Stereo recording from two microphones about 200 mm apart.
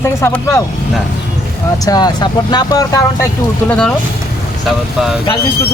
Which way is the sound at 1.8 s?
20° left (ahead or behind).